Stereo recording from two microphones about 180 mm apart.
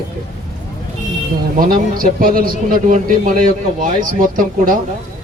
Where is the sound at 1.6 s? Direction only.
50° right (ahead or behind).